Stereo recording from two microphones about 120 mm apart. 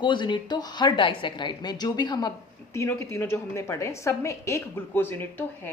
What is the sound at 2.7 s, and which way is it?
A woman's voice, 25° left (ahead or behind).